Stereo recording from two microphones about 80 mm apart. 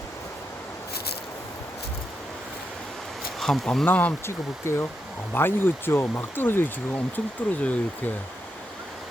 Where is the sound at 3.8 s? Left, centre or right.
Centre.